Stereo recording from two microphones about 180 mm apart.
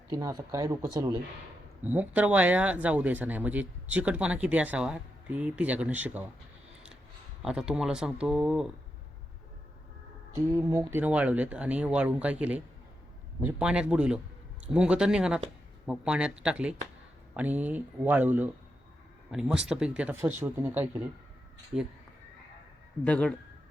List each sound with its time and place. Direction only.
0.1 s speech: 20° right (ahead or behind)
1.8 s speech: 10° right (ahead or behind)
7.4 s speech: 5° right (ahead or behind)
10.3 s speech: 15° right (ahead or behind)
23.0 s a man's voice: 5° left (ahead or behind)